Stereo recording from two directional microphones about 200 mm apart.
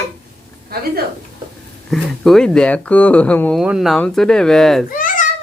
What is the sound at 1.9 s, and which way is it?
Speech, centre (ahead or behind).